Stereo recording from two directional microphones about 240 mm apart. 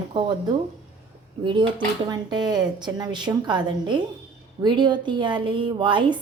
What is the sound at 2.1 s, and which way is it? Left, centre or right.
A woman's voice, centre.